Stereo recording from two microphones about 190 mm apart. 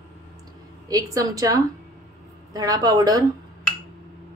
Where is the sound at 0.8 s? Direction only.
20° right (ahead or behind).